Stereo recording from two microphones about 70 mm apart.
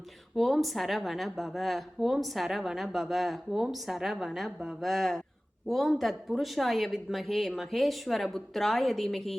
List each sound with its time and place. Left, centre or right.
0.3 s a woman's voice: centre